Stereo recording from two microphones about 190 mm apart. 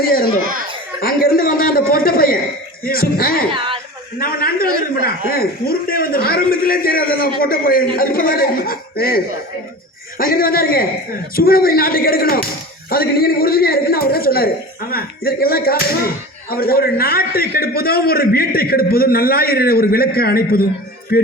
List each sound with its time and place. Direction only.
0.0 s a man's voice: 50° left (ahead or behind)
1.0 s a sound: 50° left (ahead or behind)
2.8 s a man's voice: 50° left (ahead or behind)